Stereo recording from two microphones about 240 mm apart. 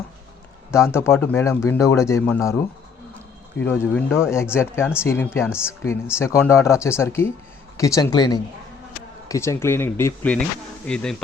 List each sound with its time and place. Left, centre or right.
0.7 s speech: centre
3.6 s speech: centre